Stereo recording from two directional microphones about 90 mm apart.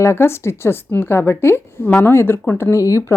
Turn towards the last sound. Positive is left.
turn(degrees=35)  # may be behind; listen again after turning